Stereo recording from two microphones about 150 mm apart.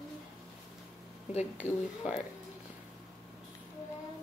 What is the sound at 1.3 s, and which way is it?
Speech, 45° left (ahead or behind).